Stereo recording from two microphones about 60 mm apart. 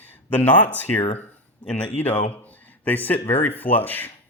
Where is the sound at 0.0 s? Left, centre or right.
Left.